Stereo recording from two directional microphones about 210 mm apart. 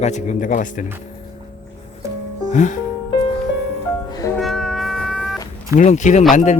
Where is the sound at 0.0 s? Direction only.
35° left (ahead or behind).